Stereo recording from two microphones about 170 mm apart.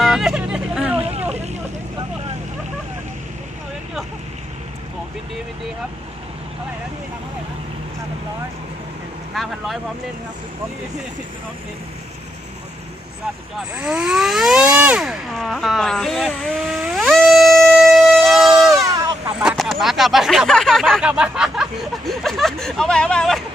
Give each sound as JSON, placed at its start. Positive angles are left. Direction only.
{"t": 0.0, "sound": "hubbub", "side_deg": -5}
{"t": 0.9, "sound": "vehicle", "side_deg": -35}
{"t": 9.3, "sound": "vehicle", "side_deg": 0}
{"t": 13.7, "sound": "vehicle", "side_deg": -5}
{"t": 18.9, "sound": "a sound", "side_deg": -20}
{"t": 19.4, "sound": "speech", "side_deg": -5}